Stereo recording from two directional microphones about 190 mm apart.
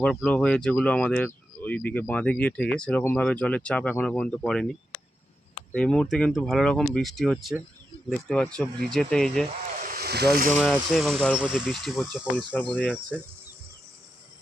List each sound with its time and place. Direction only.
0.0 s speech: 5° left (ahead or behind)
9.5 s a sound: 40° right (ahead or behind)
10.6 s speech: centre (ahead or behind)